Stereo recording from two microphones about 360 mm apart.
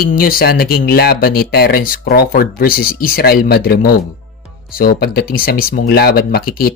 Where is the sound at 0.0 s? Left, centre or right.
Left.